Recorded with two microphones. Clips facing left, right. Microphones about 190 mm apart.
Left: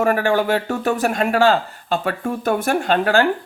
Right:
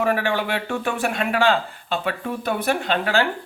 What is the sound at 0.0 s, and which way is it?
Speech, 45° left (ahead or behind).